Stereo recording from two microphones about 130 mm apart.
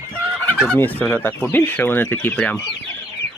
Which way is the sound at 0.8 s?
10° left (ahead or behind).